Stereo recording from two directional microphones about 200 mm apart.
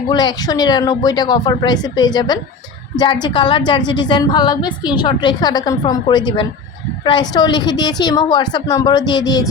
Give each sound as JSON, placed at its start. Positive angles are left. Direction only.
{"t": 0.1, "sound": "a woman's voice", "side_deg": 20}